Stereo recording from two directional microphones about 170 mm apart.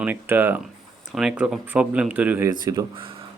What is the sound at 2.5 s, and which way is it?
Speech, 20° right (ahead or behind).